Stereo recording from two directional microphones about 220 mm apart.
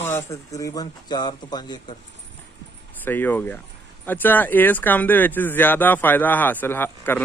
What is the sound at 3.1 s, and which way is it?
Speech, 10° left (ahead or behind).